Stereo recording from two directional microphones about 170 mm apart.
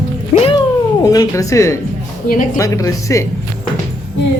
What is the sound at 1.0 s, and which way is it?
Speech, 20° left (ahead or behind).